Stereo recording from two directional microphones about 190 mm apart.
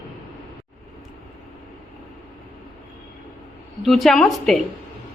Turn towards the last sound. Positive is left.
turn(degrees=0)  # may be behind; listen again after turning